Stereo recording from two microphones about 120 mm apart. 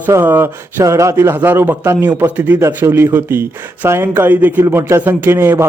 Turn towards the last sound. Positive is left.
turn(degrees=-20)  # may be behind; listen again after turning